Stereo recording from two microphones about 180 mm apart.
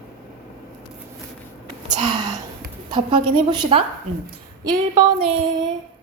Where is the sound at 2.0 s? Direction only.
25° right (ahead or behind).